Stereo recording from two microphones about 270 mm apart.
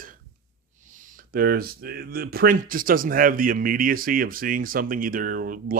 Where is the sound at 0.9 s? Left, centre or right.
Right.